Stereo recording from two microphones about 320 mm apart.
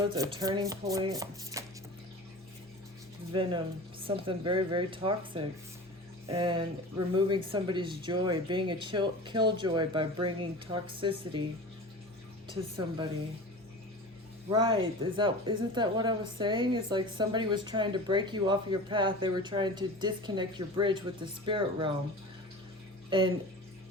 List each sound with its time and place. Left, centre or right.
0.2 s a woman's voice: centre
3.3 s a woman's voice: centre
12.5 s a woman's voice: centre
14.7 s a woman's voice: centre
23.0 s speech: centre